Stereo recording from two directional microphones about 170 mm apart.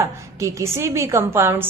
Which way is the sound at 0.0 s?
20° right (ahead or behind).